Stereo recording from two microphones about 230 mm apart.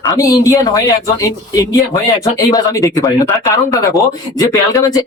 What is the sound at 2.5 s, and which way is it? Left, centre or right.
Speech, centre.